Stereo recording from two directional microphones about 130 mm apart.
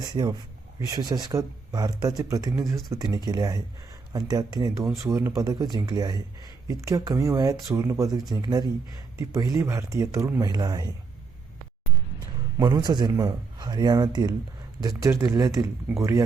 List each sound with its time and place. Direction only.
0.0 s speech: 35° right (ahead or behind)
12.5 s speech: 30° right (ahead or behind)